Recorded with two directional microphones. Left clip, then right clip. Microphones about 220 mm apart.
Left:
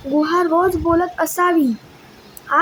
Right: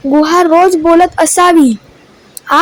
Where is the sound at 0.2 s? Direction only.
35° right (ahead or behind).